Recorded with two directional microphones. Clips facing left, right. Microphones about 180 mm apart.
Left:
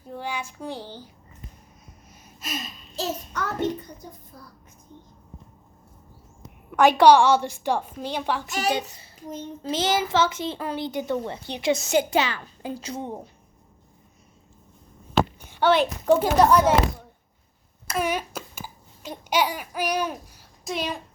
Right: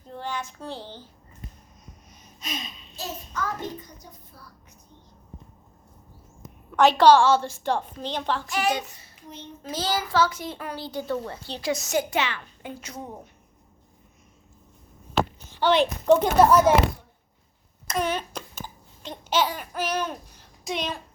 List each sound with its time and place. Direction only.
0.0 s a child's voice: 10° left (ahead or behind)
2.2 s gasp: 5° left (ahead or behind)
2.9 s a sound: 75° left (ahead or behind)
6.7 s a woman's voice: 10° left (ahead or behind)
8.4 s a child's voice: 40° left (ahead or behind)
9.6 s a child's voice: 20° left (ahead or behind)
15.6 s a child's voice: 5° left (ahead or behind)
17.8 s babbling: 10° left (ahead or behind)